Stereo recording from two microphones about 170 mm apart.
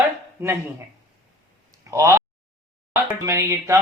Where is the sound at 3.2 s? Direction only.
20° right (ahead or behind).